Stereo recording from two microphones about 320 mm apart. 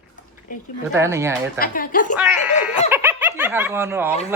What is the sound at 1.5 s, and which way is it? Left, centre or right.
Speech, left.